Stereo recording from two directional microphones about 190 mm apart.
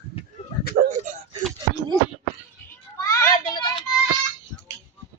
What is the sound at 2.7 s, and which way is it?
Children playing, 15° left (ahead or behind).